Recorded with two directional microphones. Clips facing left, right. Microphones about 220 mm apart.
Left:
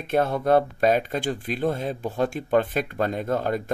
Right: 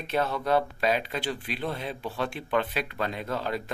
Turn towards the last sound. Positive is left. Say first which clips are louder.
# left 6 dB
turn(degrees=50)  # may be behind; listen again after turning